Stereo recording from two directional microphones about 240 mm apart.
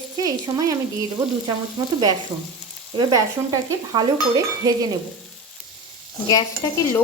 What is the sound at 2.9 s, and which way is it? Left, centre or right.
Frying, centre.